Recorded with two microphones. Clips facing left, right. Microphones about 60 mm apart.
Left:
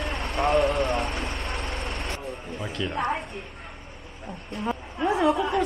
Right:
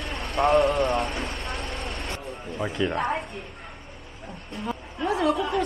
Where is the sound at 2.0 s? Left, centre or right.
Centre.